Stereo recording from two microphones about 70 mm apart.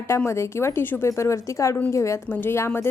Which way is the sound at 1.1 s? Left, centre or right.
Left.